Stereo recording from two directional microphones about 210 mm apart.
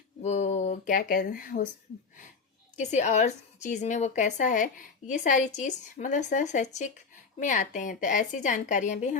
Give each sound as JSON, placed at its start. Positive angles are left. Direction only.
{"t": 0.2, "sound": "speech", "side_deg": 35}
{"t": 2.7, "sound": "a woman's voice", "side_deg": 35}